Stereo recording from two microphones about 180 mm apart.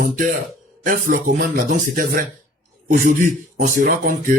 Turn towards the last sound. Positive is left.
turn(degrees=-45)  # may be behind; listen again after turning